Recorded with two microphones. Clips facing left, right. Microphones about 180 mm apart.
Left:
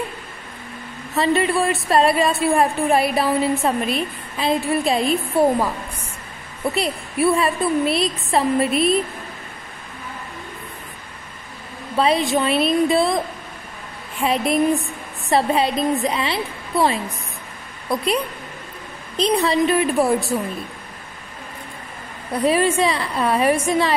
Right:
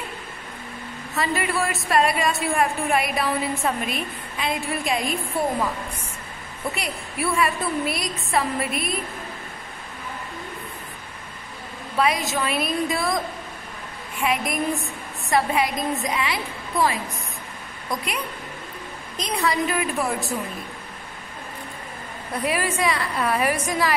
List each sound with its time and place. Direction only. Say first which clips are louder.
1.1 s a woman's voice: left 6 dB; 30° left (ahead or behind)
6.7 s a woman's voice: left 10 dB; 30° left (ahead or behind)
12.0 s a woman's voice: left 5 dB; 30° left (ahead or behind)
22.4 s a woman's voice: left 7 dB; 30° left (ahead or behind)